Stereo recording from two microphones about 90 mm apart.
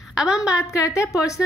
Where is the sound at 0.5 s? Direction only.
40° left (ahead or behind).